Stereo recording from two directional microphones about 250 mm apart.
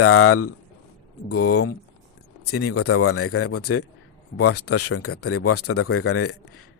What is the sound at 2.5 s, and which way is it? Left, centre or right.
Speech, left.